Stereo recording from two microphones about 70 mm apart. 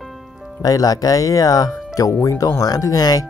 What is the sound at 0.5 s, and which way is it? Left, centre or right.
Speech, left.